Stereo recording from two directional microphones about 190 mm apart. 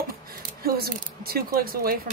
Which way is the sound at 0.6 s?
50° right (ahead or behind).